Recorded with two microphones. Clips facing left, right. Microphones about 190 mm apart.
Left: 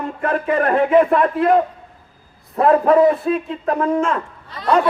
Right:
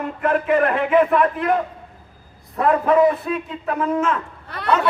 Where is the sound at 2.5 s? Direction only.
35° left (ahead or behind).